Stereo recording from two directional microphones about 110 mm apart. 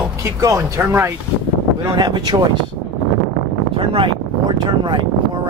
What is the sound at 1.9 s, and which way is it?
Speech, 40° right (ahead or behind).